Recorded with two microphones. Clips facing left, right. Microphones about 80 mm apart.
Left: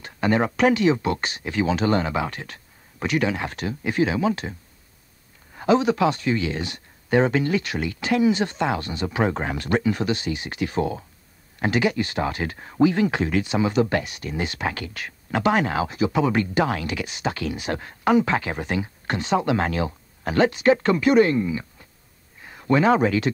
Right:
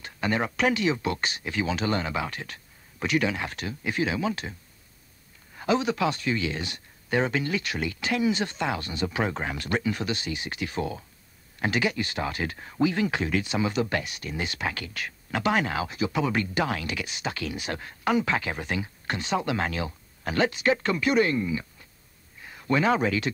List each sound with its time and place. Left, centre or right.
0.0 s speech: left